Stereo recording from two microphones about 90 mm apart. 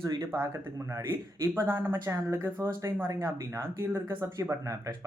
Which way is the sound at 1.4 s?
30° right (ahead or behind).